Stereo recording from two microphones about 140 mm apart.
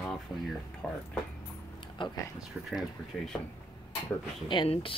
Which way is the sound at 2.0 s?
35° left (ahead or behind).